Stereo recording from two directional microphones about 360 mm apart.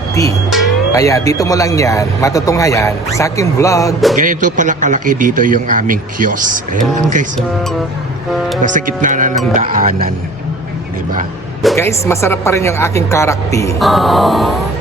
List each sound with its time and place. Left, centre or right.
0.1 s speech: centre
4.1 s speech: right
7.3 s speech: centre
8.6 s speech: right
11.6 s speech: centre